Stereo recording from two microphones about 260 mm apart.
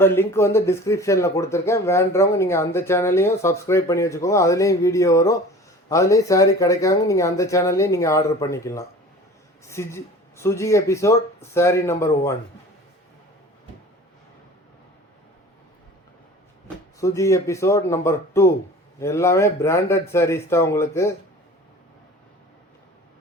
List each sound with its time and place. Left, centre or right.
0.0 s speech: centre
16.6 s speech: centre